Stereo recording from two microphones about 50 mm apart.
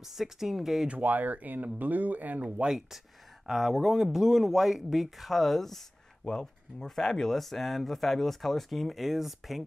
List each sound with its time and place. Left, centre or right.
0.0 s speech: centre
0.8 s speech: right
3.4 s speech: centre